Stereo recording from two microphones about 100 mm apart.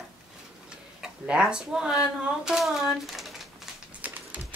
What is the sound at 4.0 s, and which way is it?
Typing, 15° right (ahead or behind).